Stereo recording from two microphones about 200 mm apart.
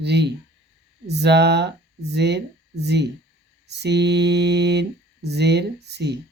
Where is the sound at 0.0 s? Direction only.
55° right (ahead or behind).